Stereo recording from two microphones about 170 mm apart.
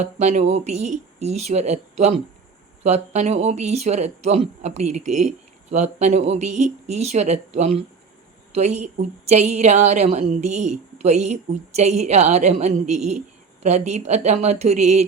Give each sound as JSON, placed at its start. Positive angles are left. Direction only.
{"t": 0.0, "sound": "a woman's voice", "side_deg": -40}